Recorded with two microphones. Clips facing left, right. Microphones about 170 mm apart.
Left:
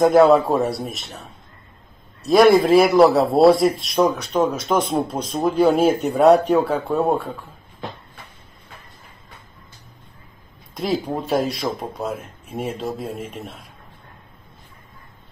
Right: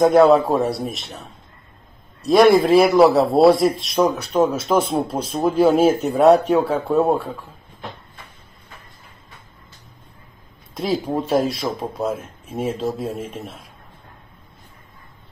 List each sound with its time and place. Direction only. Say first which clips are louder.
0.0 s speech: even; centre (ahead or behind)
10.7 s speech: right 1 dB; centre (ahead or behind)